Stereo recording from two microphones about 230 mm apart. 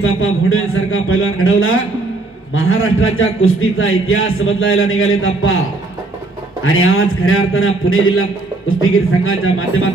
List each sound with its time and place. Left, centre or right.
0.0 s a man's voice: left
6.6 s a man's voice: left